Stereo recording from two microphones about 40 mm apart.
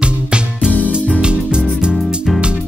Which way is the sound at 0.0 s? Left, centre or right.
Right.